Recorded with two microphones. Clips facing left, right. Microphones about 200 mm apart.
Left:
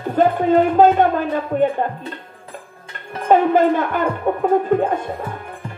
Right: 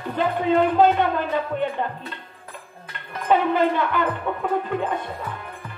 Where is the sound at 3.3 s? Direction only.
45° left (ahead or behind).